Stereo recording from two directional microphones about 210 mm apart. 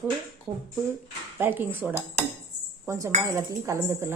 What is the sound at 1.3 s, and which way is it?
Speech, 10° right (ahead or behind).